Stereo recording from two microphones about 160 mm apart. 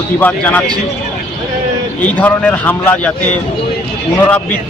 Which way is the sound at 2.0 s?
10° left (ahead or behind).